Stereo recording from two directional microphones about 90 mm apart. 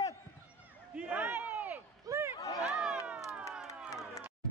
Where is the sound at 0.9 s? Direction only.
15° right (ahead or behind).